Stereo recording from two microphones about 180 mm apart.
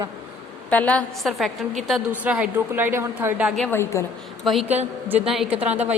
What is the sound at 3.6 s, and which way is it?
Speech, 10° left (ahead or behind).